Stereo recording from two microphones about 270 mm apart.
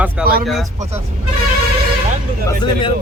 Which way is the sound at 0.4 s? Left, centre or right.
Centre.